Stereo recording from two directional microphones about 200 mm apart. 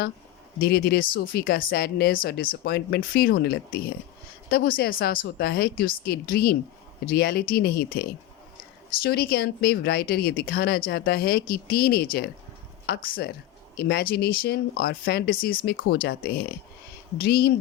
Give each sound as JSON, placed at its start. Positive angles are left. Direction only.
{"t": 0.6, "sound": "a woman's voice", "side_deg": 50}